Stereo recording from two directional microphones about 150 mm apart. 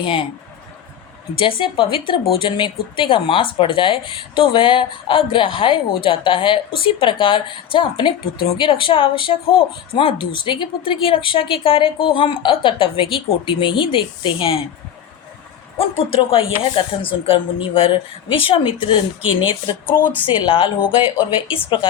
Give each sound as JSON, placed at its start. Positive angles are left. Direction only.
{"t": 0.0, "sound": "speech", "side_deg": 35}
{"t": 1.4, "sound": "speech", "side_deg": 35}
{"t": 16.0, "sound": "speech", "side_deg": 40}
{"t": 20.2, "sound": "speech", "side_deg": 35}